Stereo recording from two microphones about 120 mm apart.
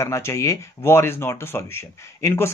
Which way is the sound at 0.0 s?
25° left (ahead or behind).